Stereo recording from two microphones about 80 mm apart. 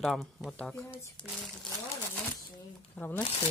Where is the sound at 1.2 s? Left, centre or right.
Centre.